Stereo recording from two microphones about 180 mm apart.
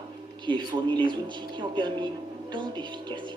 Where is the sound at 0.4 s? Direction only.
25° right (ahead or behind).